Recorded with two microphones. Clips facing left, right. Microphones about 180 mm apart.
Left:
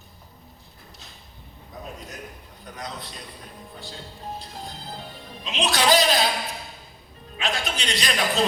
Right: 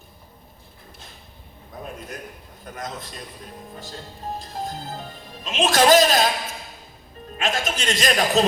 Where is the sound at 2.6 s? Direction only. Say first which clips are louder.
Right 3 dB; 45° right (ahead or behind).